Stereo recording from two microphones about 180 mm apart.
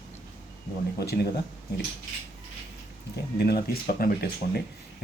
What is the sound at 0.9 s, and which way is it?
Speech, 65° left (ahead or behind).